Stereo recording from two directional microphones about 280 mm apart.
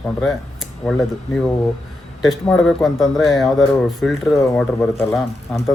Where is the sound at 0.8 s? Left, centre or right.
Centre.